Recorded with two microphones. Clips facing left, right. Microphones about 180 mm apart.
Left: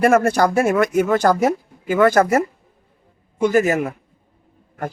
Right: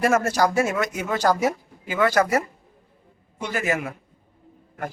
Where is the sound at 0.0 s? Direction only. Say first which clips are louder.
Left 5 dB; 55° left (ahead or behind).